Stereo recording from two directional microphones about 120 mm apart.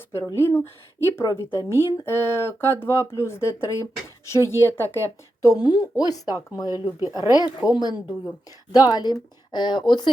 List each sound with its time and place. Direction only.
0.1 s speech: 25° left (ahead or behind)